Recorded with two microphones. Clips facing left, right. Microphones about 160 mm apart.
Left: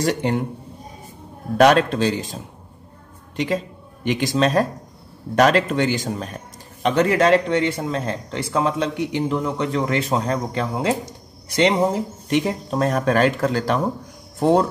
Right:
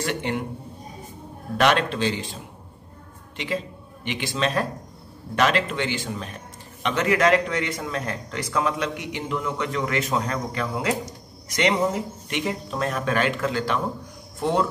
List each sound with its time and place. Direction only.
0.0 s a man's voice: 40° left (ahead or behind)
1.6 s a man's voice: 40° left (ahead or behind)